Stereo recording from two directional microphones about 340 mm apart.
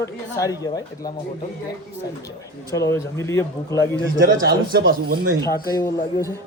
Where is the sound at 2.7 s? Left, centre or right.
Centre.